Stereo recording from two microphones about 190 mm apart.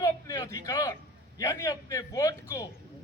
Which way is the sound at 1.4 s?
20° left (ahead or behind).